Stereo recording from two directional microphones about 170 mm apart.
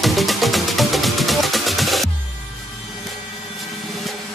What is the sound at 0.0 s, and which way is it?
Music, centre (ahead or behind).